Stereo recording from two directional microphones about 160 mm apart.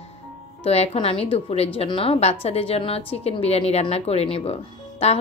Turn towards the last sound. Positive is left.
turn(degrees=40)  # may be behind; listen again after turning